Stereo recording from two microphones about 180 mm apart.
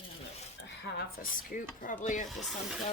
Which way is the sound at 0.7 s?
70° left (ahead or behind).